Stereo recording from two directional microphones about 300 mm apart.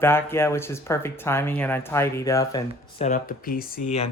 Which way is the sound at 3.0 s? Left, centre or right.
Left.